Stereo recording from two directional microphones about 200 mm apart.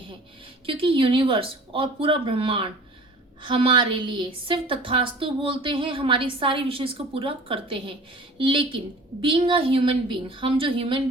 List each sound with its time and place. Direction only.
0.6 s a woman's voice: 25° right (ahead or behind)